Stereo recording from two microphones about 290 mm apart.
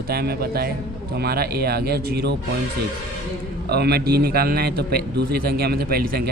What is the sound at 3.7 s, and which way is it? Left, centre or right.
Speech, right.